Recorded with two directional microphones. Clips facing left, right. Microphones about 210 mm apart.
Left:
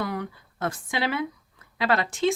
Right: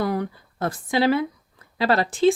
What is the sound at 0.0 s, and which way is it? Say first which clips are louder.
Speech: right 6 dB; 35° right (ahead or behind).